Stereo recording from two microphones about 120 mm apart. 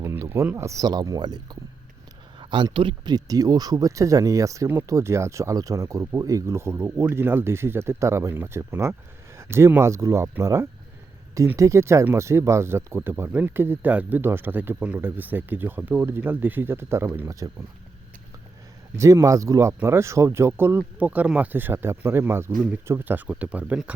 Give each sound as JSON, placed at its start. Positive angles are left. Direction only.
{"t": 0.0, "sound": "a sound", "side_deg": -25}
{"t": 0.5, "sound": "speech", "side_deg": -25}
{"t": 2.4, "sound": "speech", "side_deg": -40}
{"t": 18.9, "sound": "speech", "side_deg": -25}